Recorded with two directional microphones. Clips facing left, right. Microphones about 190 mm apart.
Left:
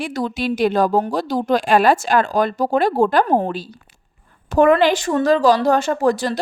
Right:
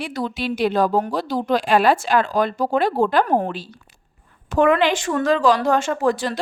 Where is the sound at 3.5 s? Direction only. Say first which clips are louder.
Left 3 dB; 40° left (ahead or behind).